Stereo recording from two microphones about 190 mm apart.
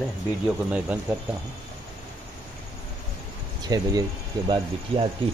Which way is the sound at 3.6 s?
20° right (ahead or behind).